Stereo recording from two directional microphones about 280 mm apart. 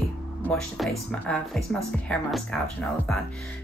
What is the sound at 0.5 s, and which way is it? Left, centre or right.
A woman's voice, centre.